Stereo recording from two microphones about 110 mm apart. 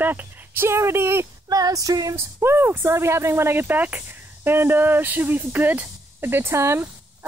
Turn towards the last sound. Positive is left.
turn(degrees=-25)  # may be behind; listen again after turning